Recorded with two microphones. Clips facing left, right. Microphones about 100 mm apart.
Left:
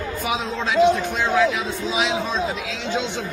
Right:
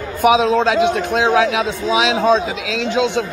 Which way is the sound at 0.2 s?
90° right.